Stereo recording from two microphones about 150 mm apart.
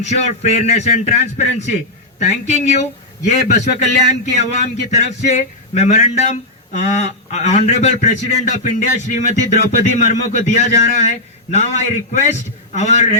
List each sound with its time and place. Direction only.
0.0 s a man's voice: 50° left (ahead or behind)